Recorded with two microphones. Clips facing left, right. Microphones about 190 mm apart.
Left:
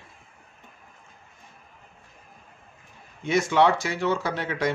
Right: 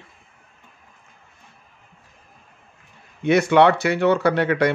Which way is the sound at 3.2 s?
65° right (ahead or behind).